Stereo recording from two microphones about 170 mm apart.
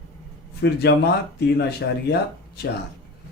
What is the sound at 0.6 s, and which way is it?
Speech, 80° left.